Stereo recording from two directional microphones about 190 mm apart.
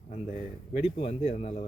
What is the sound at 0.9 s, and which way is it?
Speech, 30° left (ahead or behind).